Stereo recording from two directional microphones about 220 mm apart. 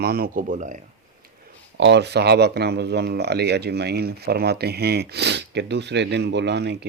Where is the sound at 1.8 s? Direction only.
50° right (ahead or behind).